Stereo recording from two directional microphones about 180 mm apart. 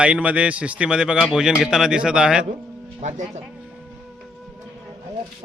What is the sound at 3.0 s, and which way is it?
Speech, 40° right (ahead or behind).